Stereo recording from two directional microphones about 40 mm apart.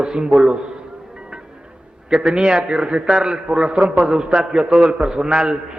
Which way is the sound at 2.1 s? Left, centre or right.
Centre.